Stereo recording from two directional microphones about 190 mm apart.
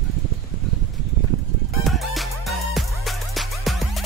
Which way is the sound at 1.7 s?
Centre (ahead or behind).